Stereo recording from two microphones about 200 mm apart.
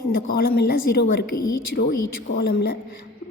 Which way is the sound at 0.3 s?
50° left (ahead or behind).